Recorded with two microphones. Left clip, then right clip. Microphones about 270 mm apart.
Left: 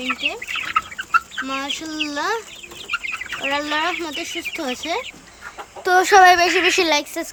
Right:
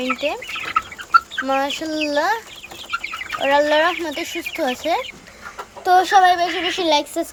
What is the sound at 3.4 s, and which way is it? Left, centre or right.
Speech, centre.